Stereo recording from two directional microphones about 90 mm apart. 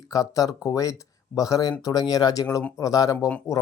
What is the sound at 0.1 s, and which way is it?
Speech, 40° left (ahead or behind).